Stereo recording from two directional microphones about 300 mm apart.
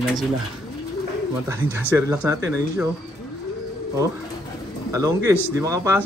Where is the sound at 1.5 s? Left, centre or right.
Centre.